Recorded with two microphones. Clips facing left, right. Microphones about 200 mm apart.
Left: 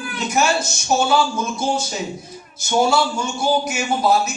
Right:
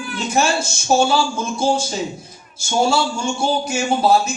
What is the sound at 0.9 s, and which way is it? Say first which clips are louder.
Speech: right 1 dB; 30° right (ahead or behind).